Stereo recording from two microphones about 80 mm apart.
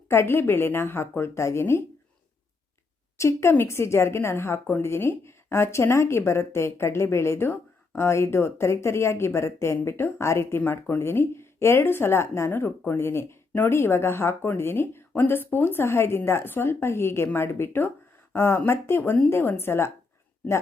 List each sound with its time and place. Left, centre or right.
0.1 s a woman's voice: left
3.2 s a woman's voice: left
10.6 s a woman's voice: left